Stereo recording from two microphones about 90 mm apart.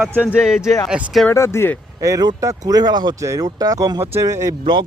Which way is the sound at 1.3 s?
30° left (ahead or behind).